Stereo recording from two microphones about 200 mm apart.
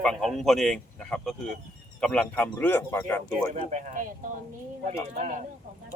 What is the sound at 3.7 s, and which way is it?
Speech, 35° right (ahead or behind).